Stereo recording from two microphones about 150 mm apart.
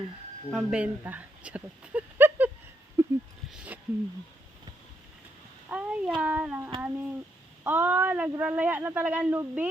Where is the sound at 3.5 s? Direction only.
10° right (ahead or behind).